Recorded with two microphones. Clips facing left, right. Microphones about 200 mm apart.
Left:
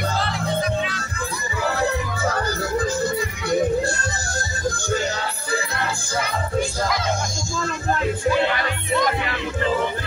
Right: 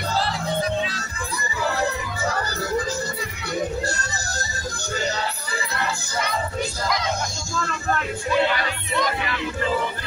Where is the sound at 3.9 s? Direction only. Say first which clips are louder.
Left 3 dB; 50° left (ahead or behind).